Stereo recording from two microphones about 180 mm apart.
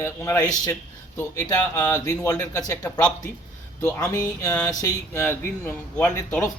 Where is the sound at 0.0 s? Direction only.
15° left (ahead or behind).